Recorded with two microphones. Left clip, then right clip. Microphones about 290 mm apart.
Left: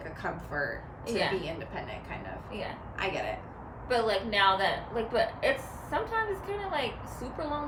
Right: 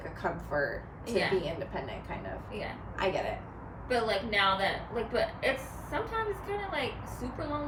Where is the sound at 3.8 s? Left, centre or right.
Centre.